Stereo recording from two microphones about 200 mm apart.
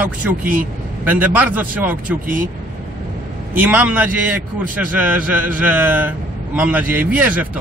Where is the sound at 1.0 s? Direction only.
10° right (ahead or behind).